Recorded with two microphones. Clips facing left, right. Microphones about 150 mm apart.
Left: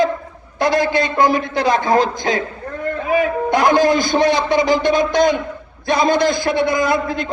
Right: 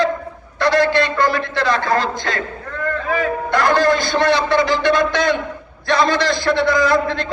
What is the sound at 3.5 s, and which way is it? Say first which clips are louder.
A man's voice: left 1 dB; 45° left (ahead or behind).